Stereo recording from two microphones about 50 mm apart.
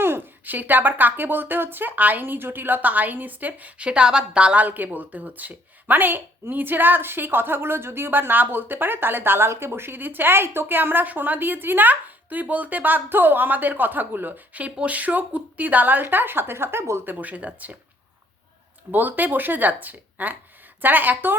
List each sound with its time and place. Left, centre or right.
0.0 s a sound: right
0.4 s a woman's voice: right
3.8 s a woman's voice: right
4.6 s a woman's voice: right
17.1 s a woman's voice: right
18.9 s a woman's voice: right